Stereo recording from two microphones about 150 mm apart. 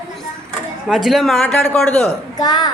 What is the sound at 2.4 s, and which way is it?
Speech, 25° left (ahead or behind).